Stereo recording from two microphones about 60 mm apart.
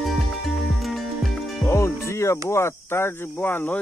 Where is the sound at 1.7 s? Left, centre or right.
Left.